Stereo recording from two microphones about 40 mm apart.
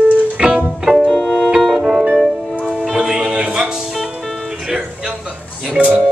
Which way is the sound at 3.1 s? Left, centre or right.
Right.